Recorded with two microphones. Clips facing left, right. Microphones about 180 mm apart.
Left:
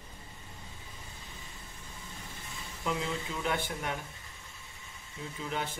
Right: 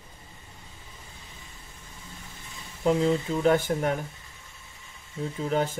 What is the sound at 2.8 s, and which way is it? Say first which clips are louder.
Speech: right 11 dB; 40° right (ahead or behind).